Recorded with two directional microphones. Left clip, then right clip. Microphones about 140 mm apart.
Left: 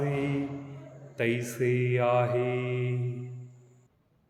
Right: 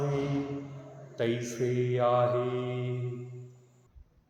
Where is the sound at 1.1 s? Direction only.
35° left (ahead or behind).